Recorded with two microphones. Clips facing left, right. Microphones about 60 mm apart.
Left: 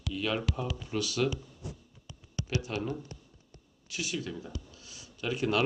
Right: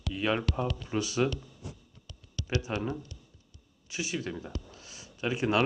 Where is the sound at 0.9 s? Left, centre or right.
Right.